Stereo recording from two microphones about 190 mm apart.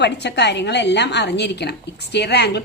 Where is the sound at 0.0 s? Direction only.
65° left (ahead or behind).